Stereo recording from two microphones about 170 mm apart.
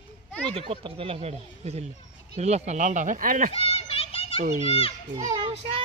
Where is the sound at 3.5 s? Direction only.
35° left (ahead or behind).